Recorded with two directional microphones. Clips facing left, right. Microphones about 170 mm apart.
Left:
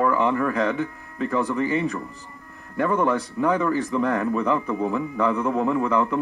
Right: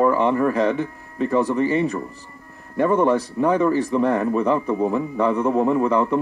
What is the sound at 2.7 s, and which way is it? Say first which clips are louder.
A man's voice: right 4 dB; 25° right (ahead or behind).